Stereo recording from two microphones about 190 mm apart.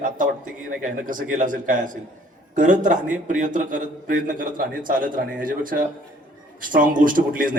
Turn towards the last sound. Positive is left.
turn(degrees=-45)  # may be behind; listen again after turning